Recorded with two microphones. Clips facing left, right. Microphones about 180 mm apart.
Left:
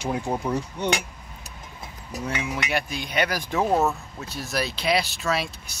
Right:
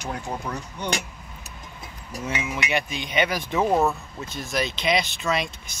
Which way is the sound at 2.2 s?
Centre (ahead or behind).